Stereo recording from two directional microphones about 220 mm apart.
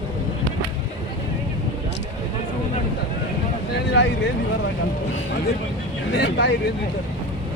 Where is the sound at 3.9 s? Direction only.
50° left (ahead or behind).